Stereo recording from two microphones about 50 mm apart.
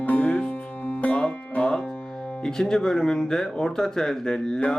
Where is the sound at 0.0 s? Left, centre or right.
Left.